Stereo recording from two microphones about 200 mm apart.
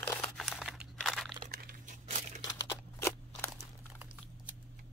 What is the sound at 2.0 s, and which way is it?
Crumpling, 35° right (ahead or behind).